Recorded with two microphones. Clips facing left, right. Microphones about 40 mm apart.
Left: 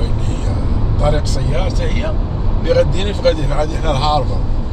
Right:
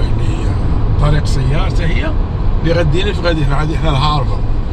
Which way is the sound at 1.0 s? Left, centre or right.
Right.